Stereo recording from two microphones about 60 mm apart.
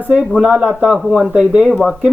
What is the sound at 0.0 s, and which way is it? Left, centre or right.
Speech, right.